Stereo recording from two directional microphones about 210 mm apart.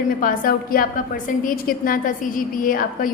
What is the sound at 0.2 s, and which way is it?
A woman's voice, 40° left (ahead or behind).